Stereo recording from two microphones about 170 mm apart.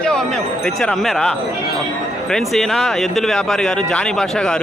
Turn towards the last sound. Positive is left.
turn(degrees=5)  # may be behind; listen again after turning